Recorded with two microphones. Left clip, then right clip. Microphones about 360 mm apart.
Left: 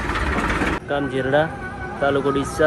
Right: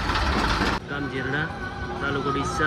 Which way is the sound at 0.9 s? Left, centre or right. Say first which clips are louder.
Left 8 dB; centre.